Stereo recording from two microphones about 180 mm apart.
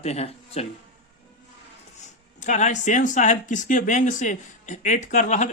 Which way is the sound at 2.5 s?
45° left (ahead or behind).